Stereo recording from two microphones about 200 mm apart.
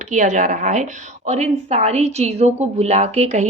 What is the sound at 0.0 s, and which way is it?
A woman's voice, 40° right (ahead or behind).